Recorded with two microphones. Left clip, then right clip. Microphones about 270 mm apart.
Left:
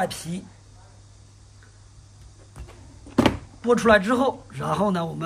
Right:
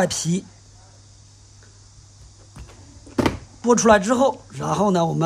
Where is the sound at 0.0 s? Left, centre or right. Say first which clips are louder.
Right 5 dB; right.